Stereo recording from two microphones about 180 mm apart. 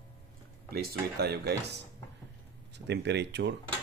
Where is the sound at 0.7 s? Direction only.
65° right (ahead or behind).